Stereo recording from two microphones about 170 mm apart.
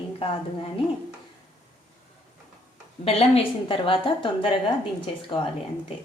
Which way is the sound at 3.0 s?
35° left (ahead or behind).